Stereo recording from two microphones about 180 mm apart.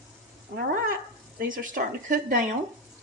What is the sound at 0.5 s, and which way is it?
Speech, 55° right (ahead or behind).